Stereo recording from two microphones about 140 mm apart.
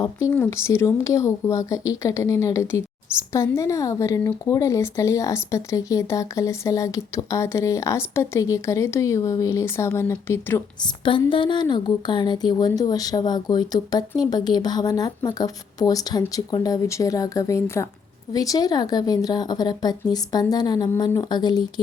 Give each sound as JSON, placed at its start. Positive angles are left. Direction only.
{"t": 0.0, "sound": "speech", "side_deg": 25}
{"t": 10.8, "sound": "a woman's voice", "side_deg": 35}